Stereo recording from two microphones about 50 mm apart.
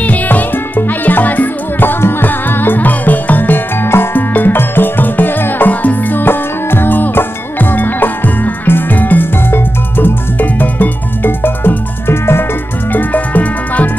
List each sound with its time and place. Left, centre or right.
0.0 s music: left
12.9 s music: left